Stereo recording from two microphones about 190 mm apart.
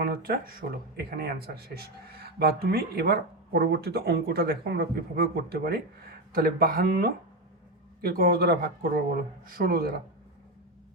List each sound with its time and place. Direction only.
0.0 s speech: 50° right (ahead or behind)